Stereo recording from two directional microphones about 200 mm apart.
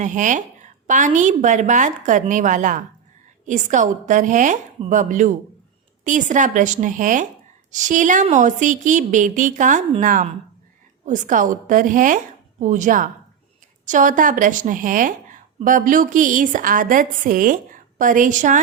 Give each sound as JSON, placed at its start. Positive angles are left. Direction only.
{"t": 0.0, "sound": "a woman's voice", "side_deg": -40}